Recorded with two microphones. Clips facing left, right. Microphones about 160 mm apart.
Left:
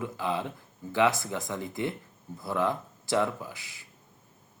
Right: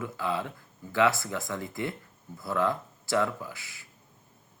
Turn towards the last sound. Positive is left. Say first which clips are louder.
# even
turn(degrees=20)  # may be behind; listen again after turning